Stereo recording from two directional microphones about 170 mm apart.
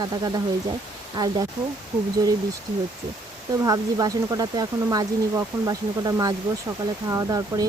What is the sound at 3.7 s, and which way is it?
Speech, 20° right (ahead or behind).